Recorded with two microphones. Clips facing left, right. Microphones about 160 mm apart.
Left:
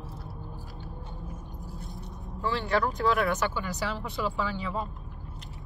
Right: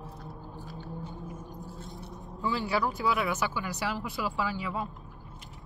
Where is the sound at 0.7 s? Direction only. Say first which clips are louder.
Right 3 dB; centre (ahead or behind).